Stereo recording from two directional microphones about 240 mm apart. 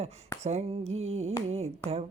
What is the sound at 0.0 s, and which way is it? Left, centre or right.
Speech, right.